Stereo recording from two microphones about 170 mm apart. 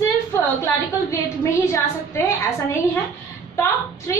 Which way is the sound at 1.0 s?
15° left (ahead or behind).